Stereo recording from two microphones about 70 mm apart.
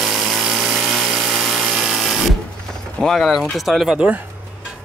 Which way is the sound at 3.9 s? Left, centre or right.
Centre.